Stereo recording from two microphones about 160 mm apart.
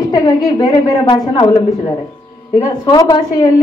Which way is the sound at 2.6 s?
25° left (ahead or behind).